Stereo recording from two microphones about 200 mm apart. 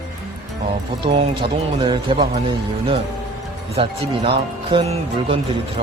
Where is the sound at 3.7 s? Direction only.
30° right (ahead or behind).